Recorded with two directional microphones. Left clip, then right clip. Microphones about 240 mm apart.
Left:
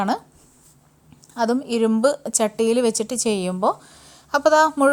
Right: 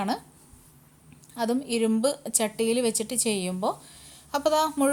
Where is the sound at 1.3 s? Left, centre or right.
Left.